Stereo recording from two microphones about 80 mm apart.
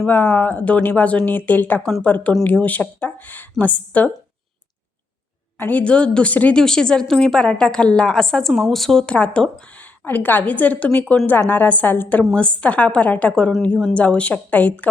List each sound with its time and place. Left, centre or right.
0.1 s a woman's voice: left
5.5 s a woman's voice: left